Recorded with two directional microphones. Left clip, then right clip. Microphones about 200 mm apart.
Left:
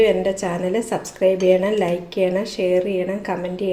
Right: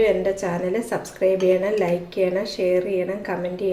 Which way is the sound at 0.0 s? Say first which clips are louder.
Left 2 dB; 20° left (ahead or behind).